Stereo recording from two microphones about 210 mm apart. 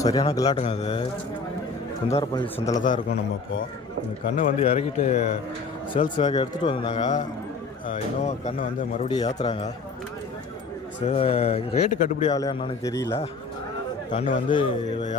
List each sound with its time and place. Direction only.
0.0 s speech: 20° left (ahead or behind)
0.5 s speech: 30° left (ahead or behind)
2.1 s speech: 25° left (ahead or behind)
2.7 s speech: 40° left (ahead or behind)
4.4 s speech: 30° left (ahead or behind)
7.0 s speech: 35° left (ahead or behind)
11.0 s speech: 25° left (ahead or behind)
12.4 s a man's voice: 20° left (ahead or behind)
14.4 s speech: 25° left (ahead or behind)